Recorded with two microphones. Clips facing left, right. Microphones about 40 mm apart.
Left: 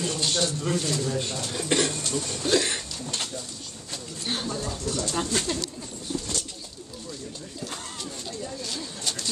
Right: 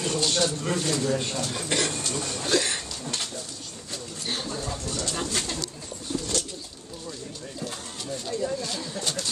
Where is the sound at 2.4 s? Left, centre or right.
Centre.